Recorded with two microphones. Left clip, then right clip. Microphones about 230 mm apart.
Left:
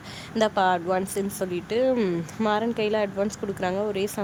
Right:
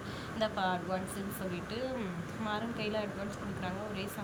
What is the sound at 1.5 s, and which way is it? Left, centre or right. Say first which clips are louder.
Speech: left 16 dB; centre.